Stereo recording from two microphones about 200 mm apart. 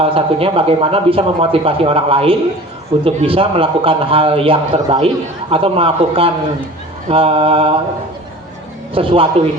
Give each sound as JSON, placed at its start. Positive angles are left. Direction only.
{"t": 0.0, "sound": "speech", "side_deg": -30}
{"t": 9.0, "sound": "a man's voice", "side_deg": -25}